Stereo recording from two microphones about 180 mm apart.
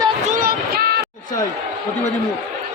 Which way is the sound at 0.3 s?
50° right (ahead or behind).